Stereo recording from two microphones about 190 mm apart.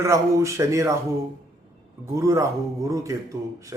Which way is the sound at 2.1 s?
15° right (ahead or behind).